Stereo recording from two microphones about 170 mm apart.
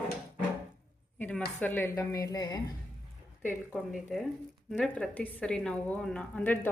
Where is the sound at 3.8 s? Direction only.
Centre (ahead or behind).